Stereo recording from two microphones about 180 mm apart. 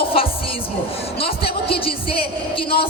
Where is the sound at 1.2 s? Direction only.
30° left (ahead or behind).